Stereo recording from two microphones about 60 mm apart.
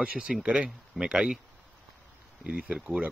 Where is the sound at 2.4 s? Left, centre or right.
Centre.